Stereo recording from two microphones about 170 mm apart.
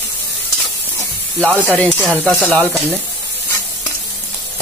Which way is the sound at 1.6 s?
10° left (ahead or behind).